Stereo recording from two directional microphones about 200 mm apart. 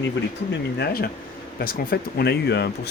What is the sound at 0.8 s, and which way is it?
Speech, 50° left (ahead or behind).